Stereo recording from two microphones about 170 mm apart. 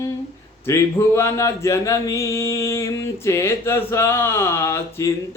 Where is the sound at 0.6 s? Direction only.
15° left (ahead or behind).